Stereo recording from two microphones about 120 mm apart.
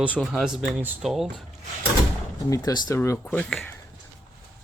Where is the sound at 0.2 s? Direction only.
Centre (ahead or behind).